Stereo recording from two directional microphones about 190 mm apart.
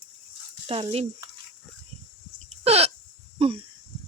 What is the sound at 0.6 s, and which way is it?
Speech, 30° right (ahead or behind).